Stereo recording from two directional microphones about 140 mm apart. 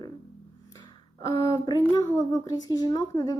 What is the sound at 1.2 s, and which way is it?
A woman's voice, 25° left (ahead or behind).